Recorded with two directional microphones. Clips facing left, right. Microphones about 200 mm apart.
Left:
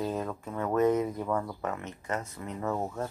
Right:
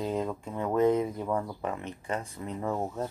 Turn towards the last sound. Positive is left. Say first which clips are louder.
# right 1 dB
turn(degrees=-10)  # may be behind; listen again after turning